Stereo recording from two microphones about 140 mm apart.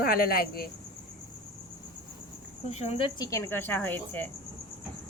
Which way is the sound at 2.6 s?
50° left (ahead or behind).